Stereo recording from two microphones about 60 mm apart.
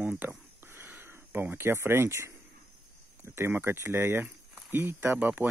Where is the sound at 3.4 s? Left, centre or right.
Right.